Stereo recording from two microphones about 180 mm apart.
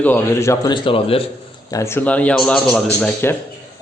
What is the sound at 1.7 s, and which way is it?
A man's voice, 15° left (ahead or behind).